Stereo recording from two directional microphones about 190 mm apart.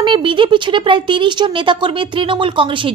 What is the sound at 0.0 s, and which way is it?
Speech, 25° right (ahead or behind).